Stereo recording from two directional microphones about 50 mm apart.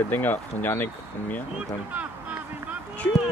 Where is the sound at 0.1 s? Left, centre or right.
Left.